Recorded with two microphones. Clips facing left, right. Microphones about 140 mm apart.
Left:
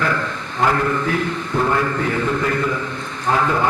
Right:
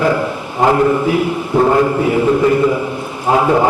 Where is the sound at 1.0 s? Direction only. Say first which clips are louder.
Right 6 dB; 15° right (ahead or behind).